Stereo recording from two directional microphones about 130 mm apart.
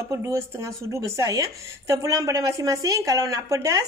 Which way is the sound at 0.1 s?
20° right (ahead or behind).